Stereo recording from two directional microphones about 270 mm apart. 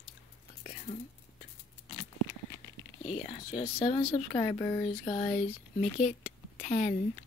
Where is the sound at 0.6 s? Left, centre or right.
Left.